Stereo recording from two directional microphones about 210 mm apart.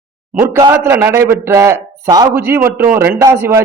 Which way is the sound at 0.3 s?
10° right (ahead or behind).